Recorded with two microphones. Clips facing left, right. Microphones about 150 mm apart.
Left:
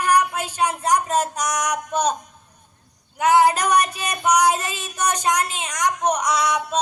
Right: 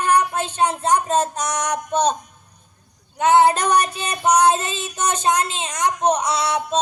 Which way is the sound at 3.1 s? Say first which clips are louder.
Right 2 dB; 25° right (ahead or behind).